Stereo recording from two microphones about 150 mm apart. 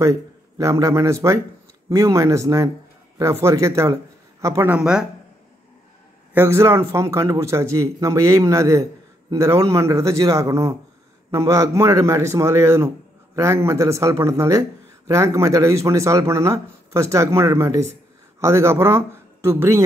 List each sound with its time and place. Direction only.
0.0 s a man's voice: 20° right (ahead or behind)
6.3 s a man's voice: 15° right (ahead or behind)